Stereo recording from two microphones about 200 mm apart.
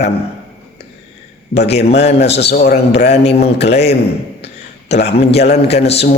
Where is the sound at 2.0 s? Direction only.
30° left (ahead or behind).